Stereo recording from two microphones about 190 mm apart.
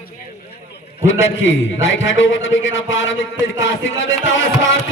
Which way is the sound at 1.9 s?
80° left.